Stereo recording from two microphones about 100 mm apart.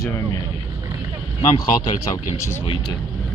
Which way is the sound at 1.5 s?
40° left (ahead or behind).